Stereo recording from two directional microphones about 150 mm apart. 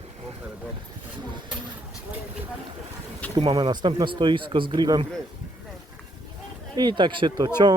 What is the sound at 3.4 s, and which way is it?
Speech, 35° right (ahead or behind).